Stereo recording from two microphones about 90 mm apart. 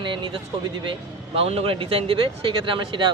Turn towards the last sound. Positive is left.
turn(degrees=-65)  # may be behind; listen again after turning